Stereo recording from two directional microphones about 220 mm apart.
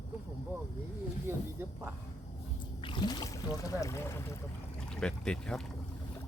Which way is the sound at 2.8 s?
20° left (ahead or behind).